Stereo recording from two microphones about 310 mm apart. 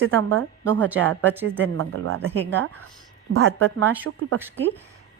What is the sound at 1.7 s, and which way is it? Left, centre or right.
Speech, right.